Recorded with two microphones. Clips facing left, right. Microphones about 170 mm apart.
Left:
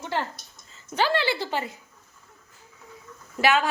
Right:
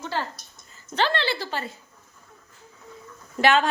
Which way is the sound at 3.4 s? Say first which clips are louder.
Right 2 dB; 5° left (ahead or behind).